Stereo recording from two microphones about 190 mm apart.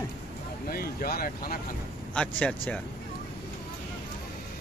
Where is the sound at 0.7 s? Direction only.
50° left (ahead or behind).